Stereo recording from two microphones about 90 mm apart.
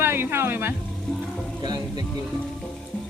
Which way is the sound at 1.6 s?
50° right (ahead or behind).